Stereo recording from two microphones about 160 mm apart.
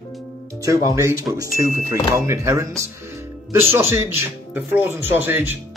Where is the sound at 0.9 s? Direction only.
20° right (ahead or behind).